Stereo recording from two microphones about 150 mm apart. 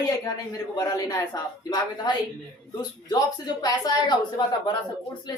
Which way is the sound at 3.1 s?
25° left (ahead or behind).